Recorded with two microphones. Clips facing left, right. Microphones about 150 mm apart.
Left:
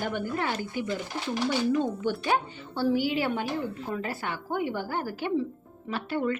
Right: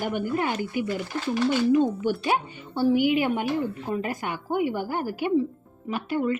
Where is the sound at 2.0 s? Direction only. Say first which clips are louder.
Right 2 dB; 10° right (ahead or behind).